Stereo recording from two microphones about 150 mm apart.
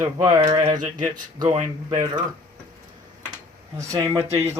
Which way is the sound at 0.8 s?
60° right (ahead or behind).